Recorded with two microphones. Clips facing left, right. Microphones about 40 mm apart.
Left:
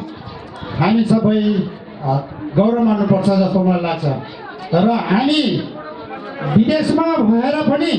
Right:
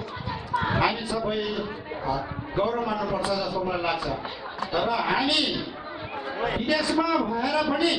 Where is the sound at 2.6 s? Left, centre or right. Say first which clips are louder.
Left 11 dB; centre.